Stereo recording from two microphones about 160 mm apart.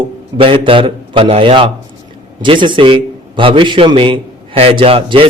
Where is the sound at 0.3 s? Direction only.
30° right (ahead or behind).